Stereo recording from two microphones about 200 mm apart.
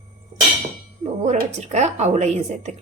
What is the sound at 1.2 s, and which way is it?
Speech, 35° right (ahead or behind).